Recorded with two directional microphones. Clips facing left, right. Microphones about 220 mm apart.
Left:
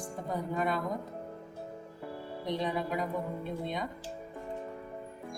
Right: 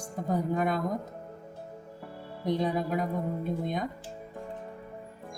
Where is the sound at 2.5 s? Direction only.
45° right (ahead or behind).